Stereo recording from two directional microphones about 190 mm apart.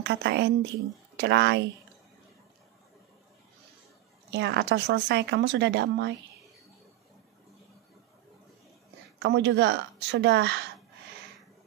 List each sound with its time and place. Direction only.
0.0 s speech: 65° right (ahead or behind)
4.3 s speech: 65° right (ahead or behind)
9.2 s speech: 65° right (ahead or behind)